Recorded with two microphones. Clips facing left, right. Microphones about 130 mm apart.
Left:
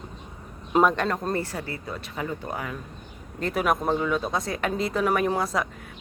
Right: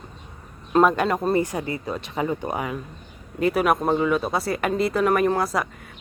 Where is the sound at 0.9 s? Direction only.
5° right (ahead or behind).